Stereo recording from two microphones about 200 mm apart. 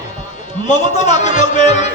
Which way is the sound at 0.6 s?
35° left (ahead or behind).